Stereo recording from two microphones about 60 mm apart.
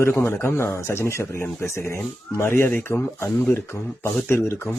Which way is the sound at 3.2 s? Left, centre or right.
Left.